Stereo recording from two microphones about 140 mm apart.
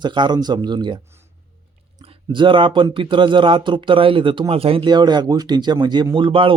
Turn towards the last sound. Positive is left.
turn(degrees=-40)  # may be behind; listen again after turning